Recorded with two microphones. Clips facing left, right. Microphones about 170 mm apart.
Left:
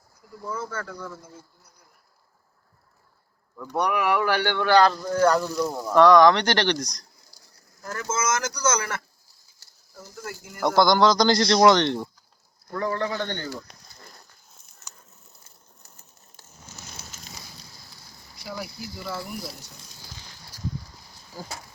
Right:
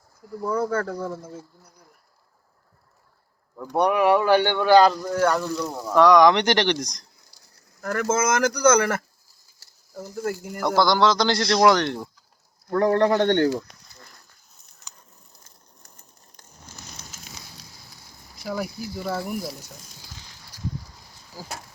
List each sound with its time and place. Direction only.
0.4 s speech: 65° right (ahead or behind)
0.9 s speech: 35° right (ahead or behind)
3.8 s speech: 25° right (ahead or behind); by 5.4 s 5° right (ahead or behind)
5.4 s speech: 10° left (ahead or behind)
5.8 s speech: 5° right (ahead or behind); by 7.0 s 20° right (ahead or behind)
7.8 s speech: 65° right (ahead or behind)
10.8 s speech: 5° right (ahead or behind)
12.7 s speech: 60° right (ahead or behind)
17.0 s fire: 10° left (ahead or behind)
18.4 s speech: 50° right (ahead or behind)
21.4 s speech: 5° right (ahead or behind)